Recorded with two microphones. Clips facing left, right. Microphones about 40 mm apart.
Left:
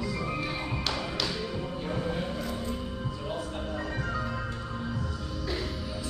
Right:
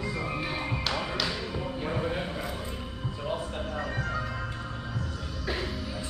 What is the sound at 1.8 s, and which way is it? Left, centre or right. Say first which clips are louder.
Music: right 1 dB; centre.